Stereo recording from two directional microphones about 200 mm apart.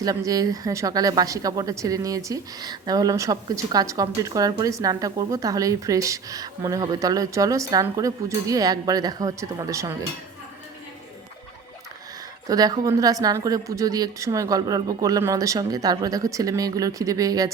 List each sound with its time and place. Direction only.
0.0 s speech: 15° right (ahead or behind)
12.5 s speech: 20° right (ahead or behind)